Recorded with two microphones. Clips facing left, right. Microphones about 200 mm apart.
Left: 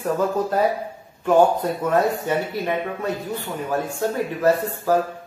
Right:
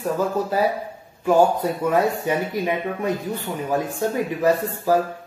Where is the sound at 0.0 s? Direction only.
5° right (ahead or behind).